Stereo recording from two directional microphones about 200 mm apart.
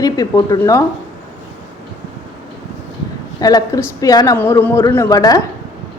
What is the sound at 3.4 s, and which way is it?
A woman's voice, 20° left (ahead or behind).